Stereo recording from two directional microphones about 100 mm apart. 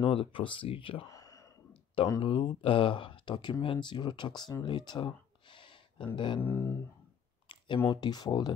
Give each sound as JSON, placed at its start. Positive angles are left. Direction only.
{"t": 0.0, "sound": "speech", "side_deg": 60}
{"t": 1.0, "sound": "whispering", "side_deg": 35}
{"t": 2.2, "sound": "speech", "side_deg": 55}
{"t": 6.4, "sound": "speech", "side_deg": 25}
{"t": 7.4, "sound": "speech", "side_deg": 55}